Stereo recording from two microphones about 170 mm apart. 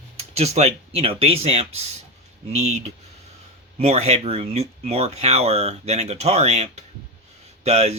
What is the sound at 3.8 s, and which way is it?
Speech, 40° right (ahead or behind).